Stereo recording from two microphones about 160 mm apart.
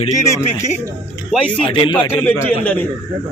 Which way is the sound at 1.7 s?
30° left (ahead or behind).